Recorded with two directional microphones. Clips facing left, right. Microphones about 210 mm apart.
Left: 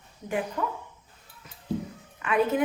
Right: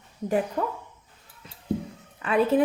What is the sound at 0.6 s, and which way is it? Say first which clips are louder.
Speech: right 3 dB; 40° right (ahead or behind).